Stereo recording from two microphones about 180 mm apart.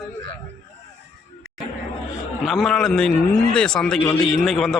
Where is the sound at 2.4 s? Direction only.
Centre (ahead or behind).